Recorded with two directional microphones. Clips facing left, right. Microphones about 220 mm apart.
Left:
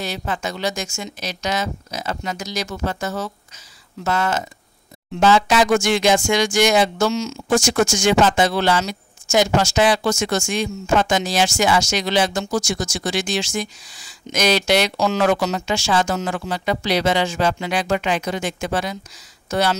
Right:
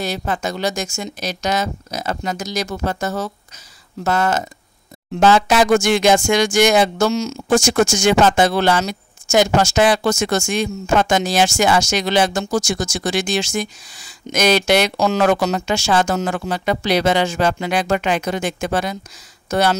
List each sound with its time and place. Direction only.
0.0 s speech: 40° right (ahead or behind)
7.4 s speech: 60° right (ahead or behind)
8.0 s speech: 50° right (ahead or behind)